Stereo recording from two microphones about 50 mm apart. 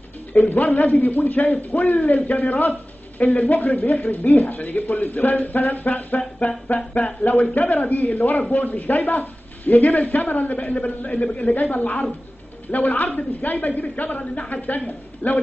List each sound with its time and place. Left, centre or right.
0.3 s a man's voice: left
7.5 s a man's voice: left